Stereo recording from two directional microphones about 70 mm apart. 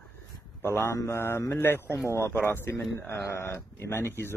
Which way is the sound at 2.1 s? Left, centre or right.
Left.